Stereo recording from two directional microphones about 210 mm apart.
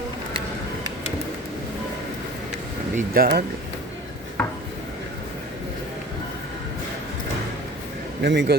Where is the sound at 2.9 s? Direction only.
45° right (ahead or behind).